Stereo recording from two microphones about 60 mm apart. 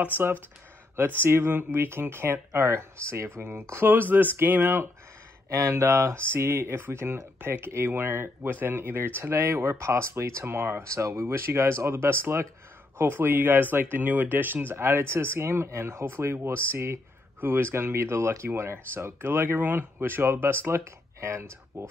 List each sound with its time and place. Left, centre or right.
0.1 s speech: right
5.5 s speech: right
10.9 s speech: right
20.7 s speech: right